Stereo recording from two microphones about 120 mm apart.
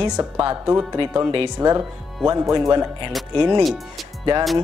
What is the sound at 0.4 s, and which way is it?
Speech, 30° right (ahead or behind).